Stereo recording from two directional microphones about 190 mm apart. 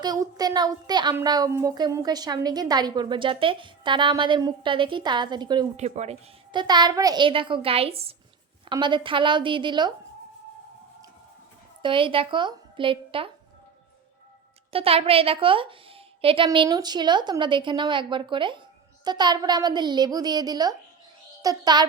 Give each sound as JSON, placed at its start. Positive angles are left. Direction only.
{"t": 0.0, "sound": "a woman's voice", "side_deg": -20}
{"t": 5.7, "sound": "speech", "side_deg": -35}
{"t": 6.6, "sound": "a woman's voice", "side_deg": -20}
{"t": 11.8, "sound": "a woman's voice", "side_deg": -25}
{"t": 14.7, "sound": "a woman's voice", "side_deg": -30}